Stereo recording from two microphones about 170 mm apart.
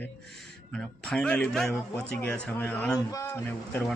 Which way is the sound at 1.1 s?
5° left (ahead or behind).